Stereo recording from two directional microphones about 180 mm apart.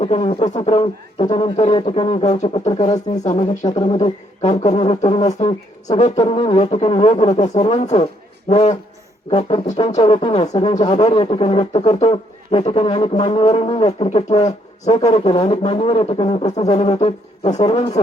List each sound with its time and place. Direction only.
0.0 s speech: 30° left (ahead or behind)
6.0 s speech: 35° left (ahead or behind)